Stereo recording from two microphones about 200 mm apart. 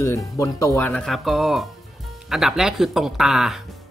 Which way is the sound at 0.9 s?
Centre (ahead or behind).